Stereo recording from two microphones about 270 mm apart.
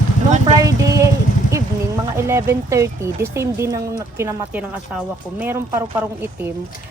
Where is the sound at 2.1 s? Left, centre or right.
Centre.